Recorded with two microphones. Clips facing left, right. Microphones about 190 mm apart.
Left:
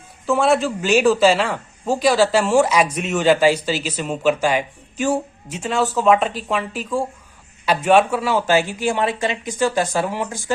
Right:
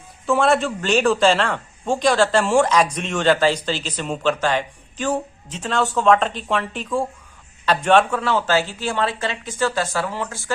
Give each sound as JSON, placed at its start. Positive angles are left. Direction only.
{"t": 0.3, "sound": "a man's voice", "side_deg": 0}